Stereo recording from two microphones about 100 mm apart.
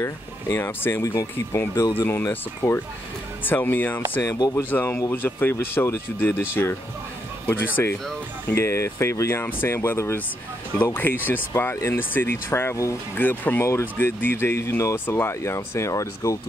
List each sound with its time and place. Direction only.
0.0 s speech: 25° left (ahead or behind)